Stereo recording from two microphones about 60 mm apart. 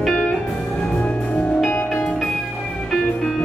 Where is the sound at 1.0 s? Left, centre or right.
Left.